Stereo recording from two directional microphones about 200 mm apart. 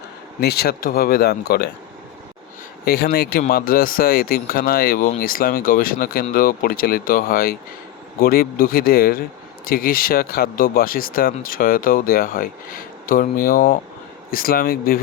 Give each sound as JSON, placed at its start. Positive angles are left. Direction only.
{"t": 0.3, "sound": "speech", "side_deg": 50}
{"t": 2.8, "sound": "speech", "side_deg": 50}